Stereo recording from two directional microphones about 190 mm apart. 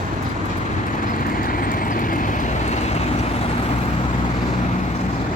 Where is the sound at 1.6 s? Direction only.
45° left (ahead or behind).